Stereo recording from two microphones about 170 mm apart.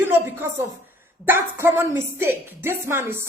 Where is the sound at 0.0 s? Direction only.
10° right (ahead or behind).